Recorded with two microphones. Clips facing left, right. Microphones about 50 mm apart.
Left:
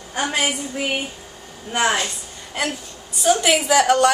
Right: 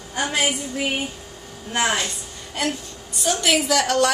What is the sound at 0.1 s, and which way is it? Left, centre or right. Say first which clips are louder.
Speech: left 1 dB; centre.